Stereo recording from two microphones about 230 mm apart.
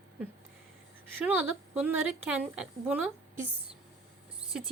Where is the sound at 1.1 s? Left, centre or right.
Centre.